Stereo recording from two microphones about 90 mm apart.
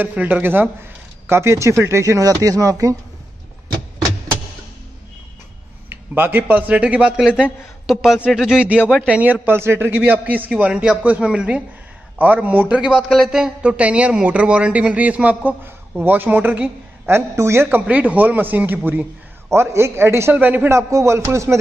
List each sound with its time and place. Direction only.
0.0 s a man's voice: 20° right (ahead or behind); by 3.0 s 40° right (ahead or behind)
5.9 s a sound: 25° right (ahead or behind)
6.5 s speech: 15° right (ahead or behind)
17.1 s a man's voice: 30° right (ahead or behind)
20.7 s speech: 30° right (ahead or behind)